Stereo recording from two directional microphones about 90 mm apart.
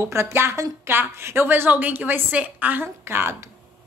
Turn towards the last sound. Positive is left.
turn(degrees=-25)  # may be behind; listen again after turning